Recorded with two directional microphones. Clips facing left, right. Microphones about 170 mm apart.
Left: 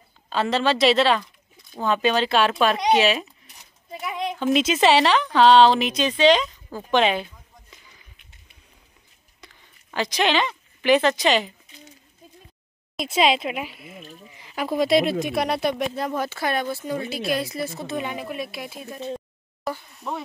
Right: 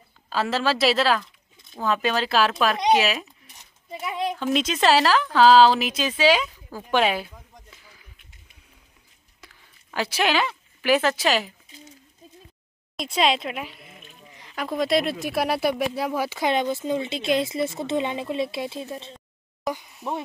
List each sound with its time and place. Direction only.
0.3 s speech: 5° right (ahead or behind)
9.4 s a sound: 5° right (ahead or behind)
12.9 s speech: 5° left (ahead or behind); by 19.0 s 25° right (ahead or behind)
19.6 s speech: 15° right (ahead or behind)